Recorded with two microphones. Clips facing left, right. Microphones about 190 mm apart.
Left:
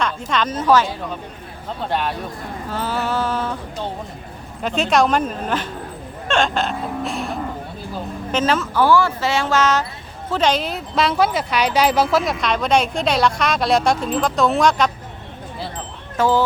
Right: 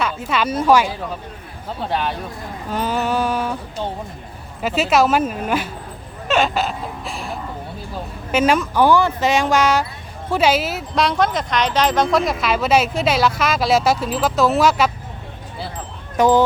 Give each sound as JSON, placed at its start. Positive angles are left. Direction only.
{"t": 0.0, "sound": "speech", "side_deg": -5}
{"t": 1.8, "sound": "speech", "side_deg": 0}
{"t": 2.6, "sound": "a sound", "side_deg": -15}
{"t": 4.6, "sound": "speech", "side_deg": -5}
{"t": 8.3, "sound": "speech", "side_deg": -10}
{"t": 16.1, "sound": "speech", "side_deg": -15}